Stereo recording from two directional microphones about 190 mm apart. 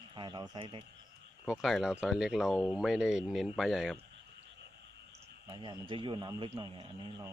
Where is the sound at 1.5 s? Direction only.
Centre (ahead or behind).